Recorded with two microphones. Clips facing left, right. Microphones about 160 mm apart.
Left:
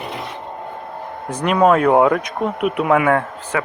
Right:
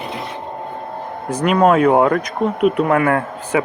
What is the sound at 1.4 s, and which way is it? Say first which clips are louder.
Speech: right 1 dB; centre (ahead or behind).